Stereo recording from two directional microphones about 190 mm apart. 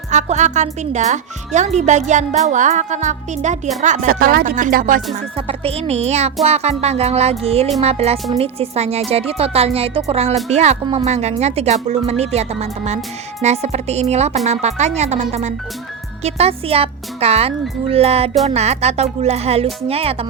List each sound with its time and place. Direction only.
0.1 s speech: 40° right (ahead or behind)
5.5 s speech: 30° right (ahead or behind)